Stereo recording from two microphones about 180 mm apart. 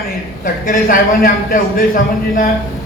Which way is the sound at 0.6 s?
50° left (ahead or behind).